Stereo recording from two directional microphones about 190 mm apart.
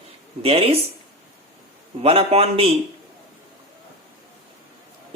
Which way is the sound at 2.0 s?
30° right (ahead or behind).